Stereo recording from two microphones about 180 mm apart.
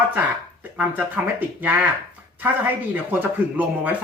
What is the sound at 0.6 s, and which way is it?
Speech, 10° right (ahead or behind).